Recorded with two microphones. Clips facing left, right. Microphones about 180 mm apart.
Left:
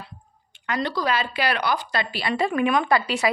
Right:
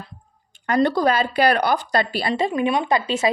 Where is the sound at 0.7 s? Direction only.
50° right (ahead or behind).